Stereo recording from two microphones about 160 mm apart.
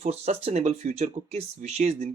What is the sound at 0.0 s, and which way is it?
Speech, 40° right (ahead or behind).